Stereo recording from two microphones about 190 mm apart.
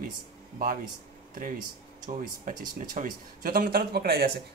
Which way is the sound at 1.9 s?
45° right (ahead or behind).